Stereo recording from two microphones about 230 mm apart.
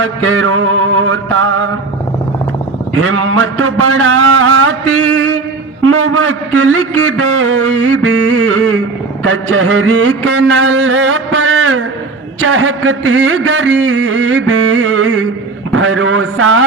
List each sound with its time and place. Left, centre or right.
0.2 s music: right
2.9 s a man's voice: right